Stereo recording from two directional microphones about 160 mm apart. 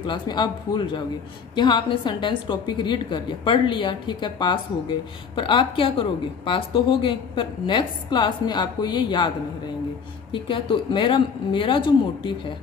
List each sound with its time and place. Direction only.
0.0 s a woman's voice: 30° left (ahead or behind)
10.3 s speech: 30° left (ahead or behind)